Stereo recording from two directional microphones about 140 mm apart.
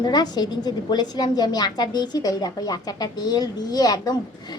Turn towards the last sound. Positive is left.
turn(degrees=30)  # may be behind; listen again after turning